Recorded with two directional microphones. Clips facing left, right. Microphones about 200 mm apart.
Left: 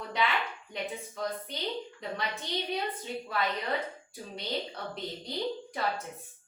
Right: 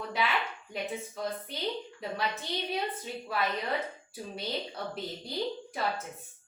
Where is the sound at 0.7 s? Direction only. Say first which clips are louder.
Right 3 dB; 5° right (ahead or behind).